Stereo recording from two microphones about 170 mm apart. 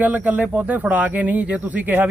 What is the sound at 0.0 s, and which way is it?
Speech, 10° right (ahead or behind).